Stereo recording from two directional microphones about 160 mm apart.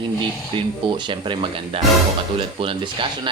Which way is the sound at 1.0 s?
30° right (ahead or behind).